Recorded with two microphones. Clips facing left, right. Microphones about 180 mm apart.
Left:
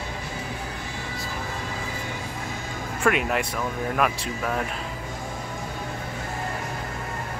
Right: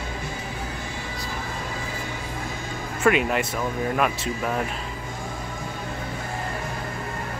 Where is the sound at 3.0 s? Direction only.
Centre (ahead or behind).